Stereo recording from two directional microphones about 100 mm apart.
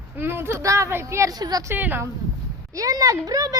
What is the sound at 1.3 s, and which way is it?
Speech, 40° right (ahead or behind).